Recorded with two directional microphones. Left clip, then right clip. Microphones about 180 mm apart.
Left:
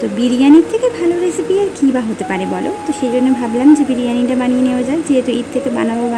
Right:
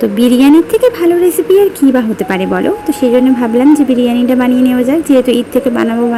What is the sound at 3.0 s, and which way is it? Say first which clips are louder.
A woman's voice: right 6 dB; 20° right (ahead or behind).